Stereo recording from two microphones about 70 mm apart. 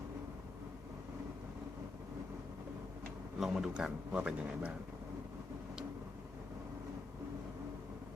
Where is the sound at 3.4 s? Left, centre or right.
Centre.